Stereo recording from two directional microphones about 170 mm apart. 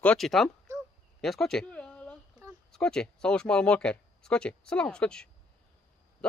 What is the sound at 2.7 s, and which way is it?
A man's voice, 5° left (ahead or behind).